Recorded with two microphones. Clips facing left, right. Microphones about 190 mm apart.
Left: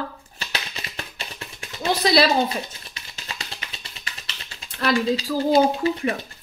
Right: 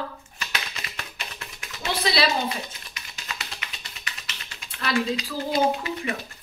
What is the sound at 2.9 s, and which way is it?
Music, 30° left (ahead or behind).